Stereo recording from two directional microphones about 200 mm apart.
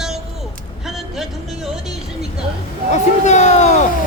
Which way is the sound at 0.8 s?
Centre (ahead or behind).